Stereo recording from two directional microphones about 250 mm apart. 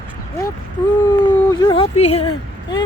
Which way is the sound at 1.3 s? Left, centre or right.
Centre.